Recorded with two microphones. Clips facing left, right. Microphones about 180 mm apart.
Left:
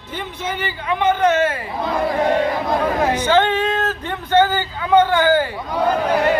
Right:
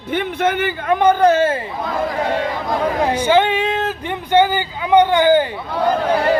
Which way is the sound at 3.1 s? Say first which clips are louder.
Right 3 dB; 10° right (ahead or behind).